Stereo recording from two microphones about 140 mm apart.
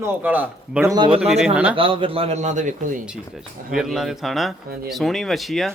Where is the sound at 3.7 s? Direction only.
5° right (ahead or behind).